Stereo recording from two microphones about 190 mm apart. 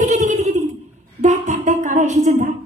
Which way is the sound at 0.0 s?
40° right (ahead or behind).